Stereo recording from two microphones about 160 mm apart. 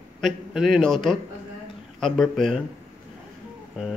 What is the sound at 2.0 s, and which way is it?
Mantra, centre (ahead or behind).